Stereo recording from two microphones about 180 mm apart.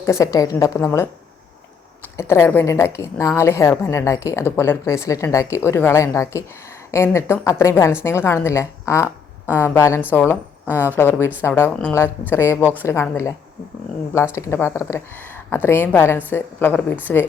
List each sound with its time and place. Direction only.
0.0 s a woman's voice: 15° left (ahead or behind)
14.3 s a woman's voice: 15° left (ahead or behind)